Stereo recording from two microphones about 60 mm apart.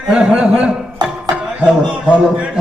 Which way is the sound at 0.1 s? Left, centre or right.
Centre.